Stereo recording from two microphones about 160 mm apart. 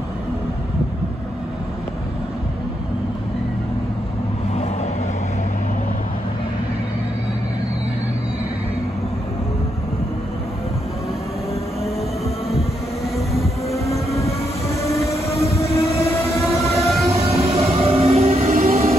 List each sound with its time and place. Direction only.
13.3 s train: centre (ahead or behind)
13.8 s train: 20° left (ahead or behind)
16.8 s train: centre (ahead or behind)
17.5 s music: 40° right (ahead or behind)
18.5 s vehicle: 60° right (ahead or behind)